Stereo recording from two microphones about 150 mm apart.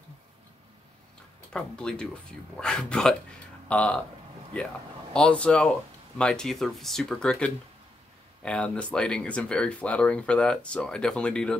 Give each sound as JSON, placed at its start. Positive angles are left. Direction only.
{"t": 1.5, "sound": "speech", "side_deg": 5}